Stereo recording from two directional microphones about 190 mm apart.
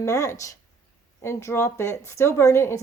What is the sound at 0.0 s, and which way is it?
Speech, 15° left (ahead or behind).